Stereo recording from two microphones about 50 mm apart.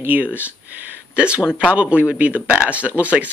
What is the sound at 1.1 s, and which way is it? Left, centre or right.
Speech, right.